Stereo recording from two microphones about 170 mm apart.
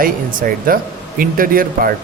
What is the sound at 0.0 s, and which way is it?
Speech, 55° right (ahead or behind).